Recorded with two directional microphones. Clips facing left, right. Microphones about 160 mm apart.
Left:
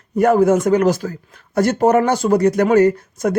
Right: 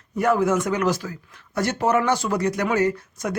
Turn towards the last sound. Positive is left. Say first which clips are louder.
# left 8 dB
turn(degrees=50)  # may be behind; listen again after turning